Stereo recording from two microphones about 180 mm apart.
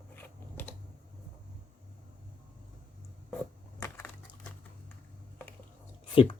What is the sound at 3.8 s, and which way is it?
Crushing, 15° left (ahead or behind).